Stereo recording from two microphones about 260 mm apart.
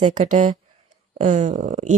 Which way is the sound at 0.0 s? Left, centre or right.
Right.